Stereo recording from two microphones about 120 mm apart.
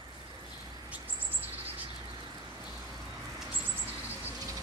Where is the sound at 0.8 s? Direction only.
15° right (ahead or behind).